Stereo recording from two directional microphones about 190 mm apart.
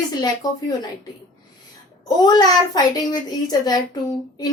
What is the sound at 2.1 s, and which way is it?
A child's voice, 20° left (ahead or behind).